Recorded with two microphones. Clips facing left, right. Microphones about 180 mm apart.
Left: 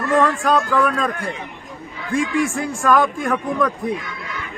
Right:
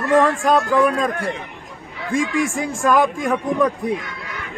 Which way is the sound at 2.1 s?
40° right (ahead or behind).